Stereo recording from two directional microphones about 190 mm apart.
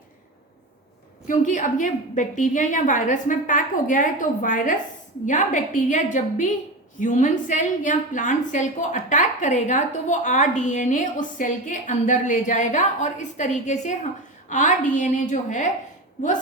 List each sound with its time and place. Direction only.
1.3 s a woman's voice: 40° left (ahead or behind)